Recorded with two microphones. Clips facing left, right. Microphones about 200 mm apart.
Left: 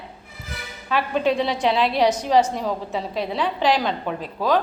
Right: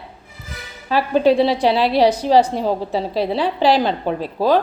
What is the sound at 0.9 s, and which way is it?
A woman's voice, 35° right (ahead or behind).